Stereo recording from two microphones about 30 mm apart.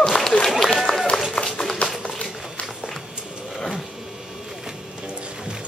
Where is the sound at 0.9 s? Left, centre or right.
Left.